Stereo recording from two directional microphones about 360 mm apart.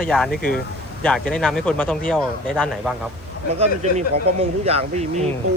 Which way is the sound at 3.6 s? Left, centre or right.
Centre.